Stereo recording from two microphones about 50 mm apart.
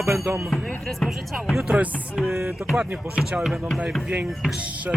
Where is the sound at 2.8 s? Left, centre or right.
Right.